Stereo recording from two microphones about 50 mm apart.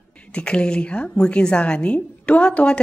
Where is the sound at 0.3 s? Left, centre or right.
Left.